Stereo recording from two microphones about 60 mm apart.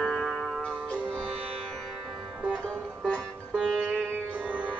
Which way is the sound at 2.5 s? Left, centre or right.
Centre.